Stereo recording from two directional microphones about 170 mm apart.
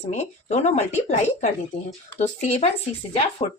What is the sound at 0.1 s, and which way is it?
Speech, 40° left (ahead or behind).